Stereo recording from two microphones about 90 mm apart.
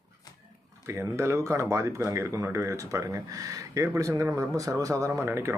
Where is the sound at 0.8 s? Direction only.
30° right (ahead or behind).